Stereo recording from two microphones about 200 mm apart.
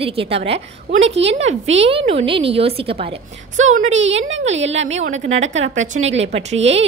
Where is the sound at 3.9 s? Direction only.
70° right (ahead or behind).